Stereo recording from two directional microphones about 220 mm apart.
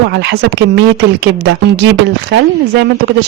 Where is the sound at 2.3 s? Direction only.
55° right (ahead or behind).